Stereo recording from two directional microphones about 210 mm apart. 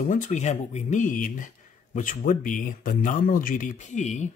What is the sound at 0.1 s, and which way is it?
Speech, 35° left (ahead or behind).